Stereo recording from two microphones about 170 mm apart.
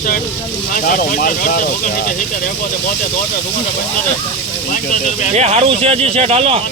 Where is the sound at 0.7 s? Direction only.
55° left (ahead or behind).